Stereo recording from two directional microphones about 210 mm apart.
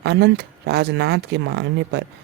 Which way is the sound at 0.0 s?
55° right (ahead or behind).